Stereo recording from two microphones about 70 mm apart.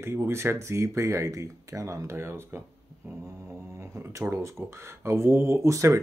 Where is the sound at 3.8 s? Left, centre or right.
Right.